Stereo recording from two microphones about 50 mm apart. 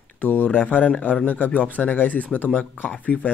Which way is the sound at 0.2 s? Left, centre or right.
Left.